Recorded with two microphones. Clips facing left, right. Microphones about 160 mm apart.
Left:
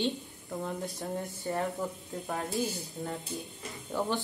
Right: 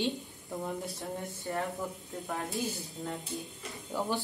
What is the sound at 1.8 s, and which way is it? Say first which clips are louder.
Speech: left 2 dB; centre (ahead or behind).